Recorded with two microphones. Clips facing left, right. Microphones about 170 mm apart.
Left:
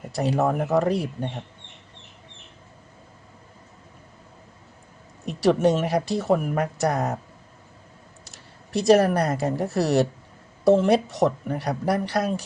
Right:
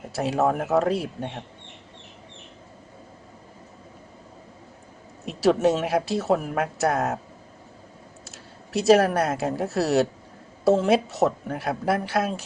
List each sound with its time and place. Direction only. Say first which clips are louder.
0.1 s speech: even; centre (ahead or behind)
5.2 s a sound: even; 5° right (ahead or behind)
5.6 s speech: left 1 dB; centre (ahead or behind)
8.2 s speech: right 4 dB; 5° right (ahead or behind)